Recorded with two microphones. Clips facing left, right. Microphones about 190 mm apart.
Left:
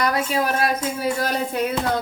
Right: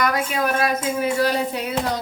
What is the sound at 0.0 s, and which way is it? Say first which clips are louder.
Speech: even; 30° left (ahead or behind).